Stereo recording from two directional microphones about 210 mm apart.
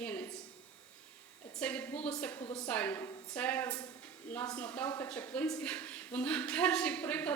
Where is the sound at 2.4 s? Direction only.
25° left (ahead or behind).